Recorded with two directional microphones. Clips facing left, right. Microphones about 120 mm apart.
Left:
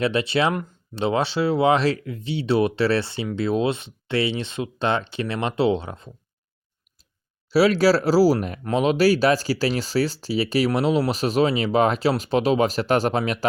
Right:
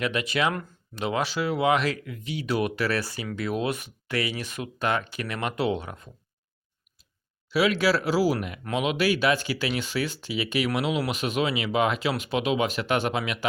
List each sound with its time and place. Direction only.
0.0 s speech: 30° left (ahead or behind)
7.5 s speech: 35° left (ahead or behind)